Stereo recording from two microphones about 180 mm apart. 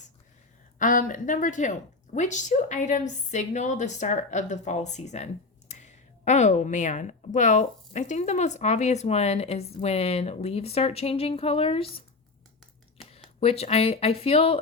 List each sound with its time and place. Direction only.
0.8 s a woman's voice: 45° left (ahead or behind); by 12.0 s 30° left (ahead or behind)
13.1 s a woman's voice: 35° left (ahead or behind)